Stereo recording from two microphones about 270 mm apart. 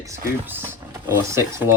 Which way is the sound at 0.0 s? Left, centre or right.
Centre.